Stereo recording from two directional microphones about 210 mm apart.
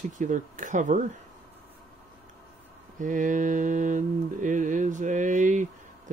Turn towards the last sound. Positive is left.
turn(degrees=-35)  # may be behind; listen again after turning